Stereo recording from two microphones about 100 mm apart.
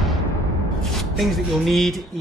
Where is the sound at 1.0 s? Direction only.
Centre (ahead or behind).